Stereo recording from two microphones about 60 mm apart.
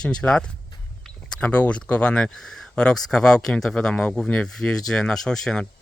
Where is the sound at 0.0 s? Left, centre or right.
Centre.